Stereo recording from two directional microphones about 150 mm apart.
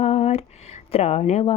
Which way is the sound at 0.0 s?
45° left (ahead or behind).